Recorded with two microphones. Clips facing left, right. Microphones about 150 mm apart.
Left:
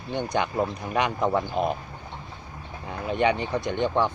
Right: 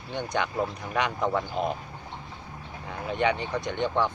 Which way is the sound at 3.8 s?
15° left (ahead or behind).